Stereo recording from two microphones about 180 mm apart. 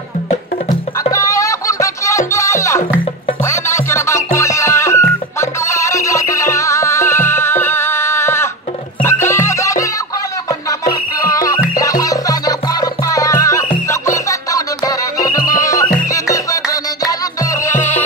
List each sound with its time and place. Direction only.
1.1 s music: 15° left (ahead or behind)
11.1 s music: 20° left (ahead or behind)